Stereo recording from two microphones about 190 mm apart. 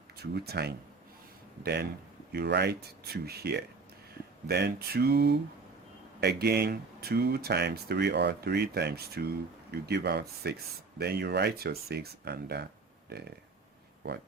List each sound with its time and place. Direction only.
0.2 s speech: 55° right (ahead or behind)